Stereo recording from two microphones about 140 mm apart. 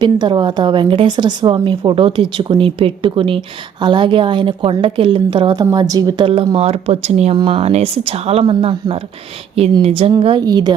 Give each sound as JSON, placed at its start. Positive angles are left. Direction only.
{"t": 0.0, "sound": "a woman's voice", "side_deg": -35}